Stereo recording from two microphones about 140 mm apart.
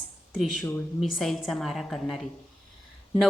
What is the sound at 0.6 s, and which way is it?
Speech, 15° left (ahead or behind).